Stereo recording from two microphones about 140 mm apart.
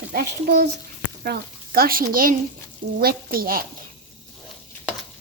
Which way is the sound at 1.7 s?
90° right.